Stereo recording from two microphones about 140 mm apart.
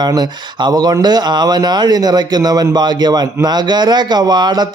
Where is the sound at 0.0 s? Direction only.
30° right (ahead or behind).